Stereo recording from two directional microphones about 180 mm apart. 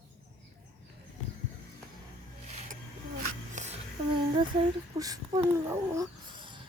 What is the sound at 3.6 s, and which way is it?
Music, 40° right (ahead or behind).